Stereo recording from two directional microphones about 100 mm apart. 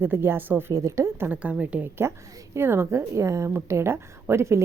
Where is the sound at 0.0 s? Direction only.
20° right (ahead or behind).